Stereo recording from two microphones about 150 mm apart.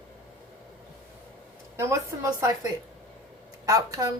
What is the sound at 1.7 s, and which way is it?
Speech, 20° right (ahead or behind).